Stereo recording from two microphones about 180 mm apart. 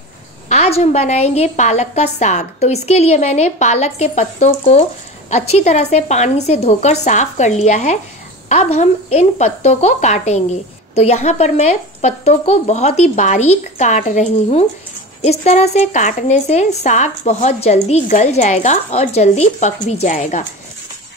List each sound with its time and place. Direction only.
0.5 s a woman's voice: 35° left (ahead or behind)